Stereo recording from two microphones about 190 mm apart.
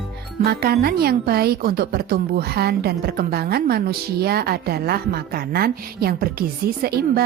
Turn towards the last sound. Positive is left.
turn(degrees=-55)  # may be behind; listen again after turning